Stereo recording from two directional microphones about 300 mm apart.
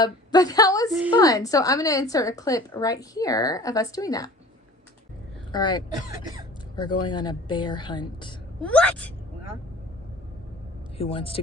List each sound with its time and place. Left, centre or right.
0.0 s a woman's voice: centre
5.5 s a woman's voice: centre
8.6 s speech: centre
10.9 s speech: centre